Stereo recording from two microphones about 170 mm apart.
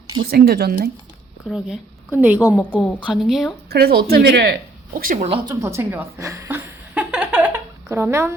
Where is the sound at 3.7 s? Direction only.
65° right (ahead or behind).